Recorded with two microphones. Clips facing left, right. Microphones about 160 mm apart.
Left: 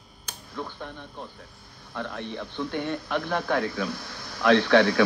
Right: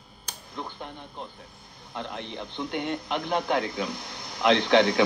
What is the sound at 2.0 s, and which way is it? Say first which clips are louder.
Speech: left 2 dB; 20° right (ahead or behind).